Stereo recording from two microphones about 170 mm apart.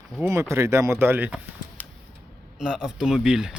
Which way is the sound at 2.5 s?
5° right (ahead or behind).